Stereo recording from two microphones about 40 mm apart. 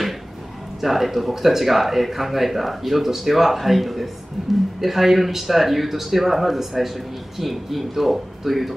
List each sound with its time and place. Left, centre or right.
0.7 s speech: centre